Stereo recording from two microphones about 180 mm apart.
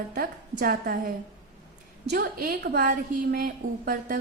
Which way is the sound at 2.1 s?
55° right (ahead or behind).